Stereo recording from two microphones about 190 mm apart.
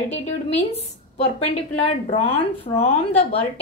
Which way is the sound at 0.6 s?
35° left (ahead or behind).